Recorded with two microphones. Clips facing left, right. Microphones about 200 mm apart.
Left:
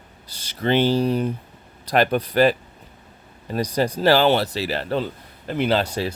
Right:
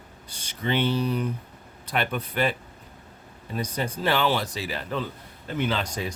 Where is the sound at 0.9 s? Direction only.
35° left (ahead or behind).